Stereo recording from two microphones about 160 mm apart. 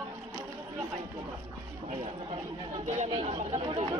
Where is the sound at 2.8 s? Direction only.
40° right (ahead or behind).